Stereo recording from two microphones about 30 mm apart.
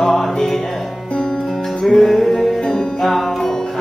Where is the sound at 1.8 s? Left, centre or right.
Centre.